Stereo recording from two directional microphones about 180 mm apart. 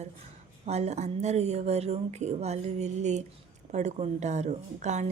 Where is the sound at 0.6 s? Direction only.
35° right (ahead or behind).